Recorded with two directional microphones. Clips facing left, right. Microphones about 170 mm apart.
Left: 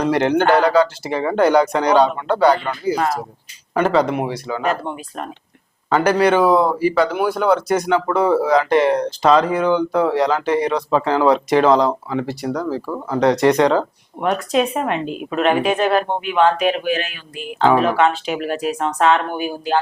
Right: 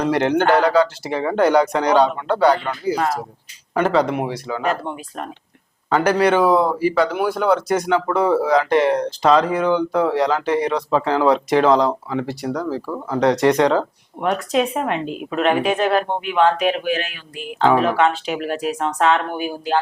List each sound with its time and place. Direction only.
0.0 s speech: 10° left (ahead or behind)
13.2 s speech: 5° left (ahead or behind)